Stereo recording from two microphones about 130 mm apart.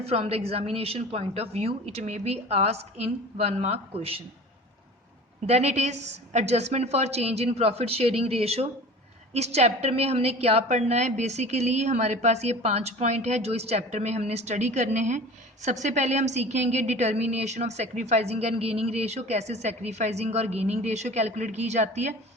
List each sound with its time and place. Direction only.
0.0 s a woman's voice: 50° right (ahead or behind)
5.5 s a woman's voice: 60° right (ahead or behind)